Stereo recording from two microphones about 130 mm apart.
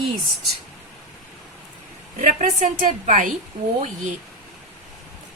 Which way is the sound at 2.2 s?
75° right (ahead or behind).